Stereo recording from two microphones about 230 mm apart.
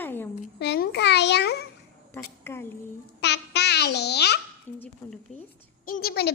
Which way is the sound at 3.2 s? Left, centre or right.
Left.